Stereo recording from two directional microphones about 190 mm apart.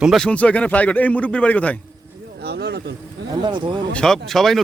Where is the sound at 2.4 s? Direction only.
60° right (ahead or behind).